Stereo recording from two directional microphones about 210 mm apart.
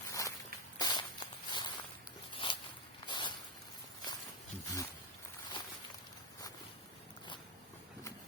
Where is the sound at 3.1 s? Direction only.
20° left (ahead or behind).